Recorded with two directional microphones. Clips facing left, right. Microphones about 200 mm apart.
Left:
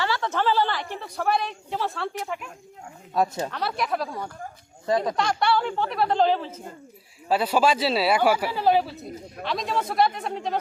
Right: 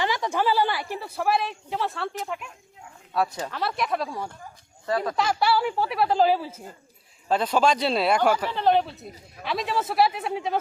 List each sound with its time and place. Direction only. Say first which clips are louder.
0.0 s a woman's voice: even; 15° right (ahead or behind)
3.2 s speech: left 2 dB; 25° left (ahead or behind)
3.5 s speech: even; centre (ahead or behind)
4.9 s speech: left 3 dB; 20° left (ahead or behind)
5.1 s a woman's voice: even; 5° right (ahead or behind)
7.3 s speech: even; 10° left (ahead or behind)